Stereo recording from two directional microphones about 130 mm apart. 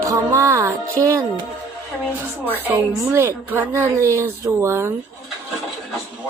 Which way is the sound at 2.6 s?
20° right (ahead or behind).